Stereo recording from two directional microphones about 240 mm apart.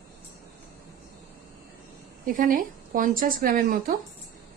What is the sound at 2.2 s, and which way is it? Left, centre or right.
A woman's voice, right.